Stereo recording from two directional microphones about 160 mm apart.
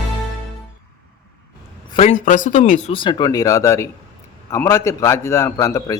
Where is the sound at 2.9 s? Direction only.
25° left (ahead or behind).